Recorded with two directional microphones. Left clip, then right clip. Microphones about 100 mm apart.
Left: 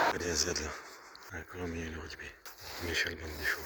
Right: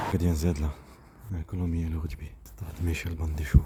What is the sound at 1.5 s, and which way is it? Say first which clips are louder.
Speech: right 5 dB; 35° right (ahead or behind).